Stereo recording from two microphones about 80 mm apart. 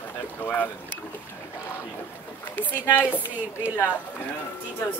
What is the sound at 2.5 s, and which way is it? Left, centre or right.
Speech, left.